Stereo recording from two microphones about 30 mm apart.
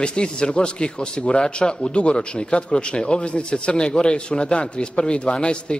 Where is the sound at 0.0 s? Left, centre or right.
Left.